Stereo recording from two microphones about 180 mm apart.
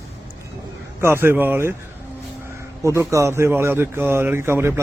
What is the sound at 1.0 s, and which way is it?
Speech, 15° right (ahead or behind).